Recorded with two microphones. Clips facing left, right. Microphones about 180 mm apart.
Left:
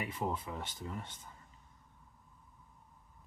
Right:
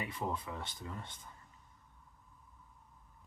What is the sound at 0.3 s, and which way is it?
Speech, 10° left (ahead or behind).